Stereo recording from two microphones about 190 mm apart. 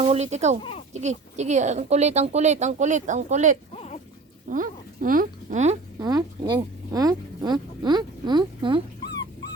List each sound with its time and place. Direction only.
0.0 s speech: 35° right (ahead or behind)
6.0 s speech: 20° right (ahead or behind)